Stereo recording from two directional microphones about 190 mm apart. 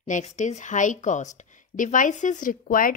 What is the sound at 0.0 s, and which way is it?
Speech, 40° left (ahead or behind).